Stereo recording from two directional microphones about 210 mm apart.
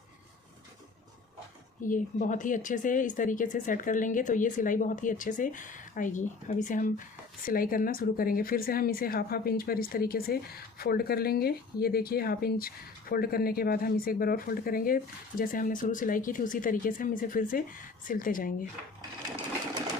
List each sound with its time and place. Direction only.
1.9 s a woman's voice: 40° left (ahead or behind)